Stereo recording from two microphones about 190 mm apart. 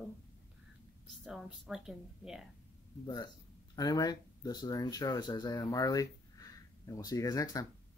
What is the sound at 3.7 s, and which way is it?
Speech, 20° left (ahead or behind).